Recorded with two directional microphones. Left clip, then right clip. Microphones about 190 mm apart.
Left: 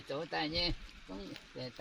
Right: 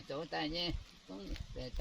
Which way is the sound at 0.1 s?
5° left (ahead or behind).